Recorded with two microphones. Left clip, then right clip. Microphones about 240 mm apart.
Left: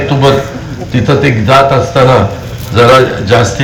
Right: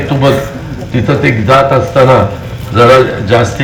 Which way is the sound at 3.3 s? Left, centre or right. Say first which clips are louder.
Left 1 dB; left.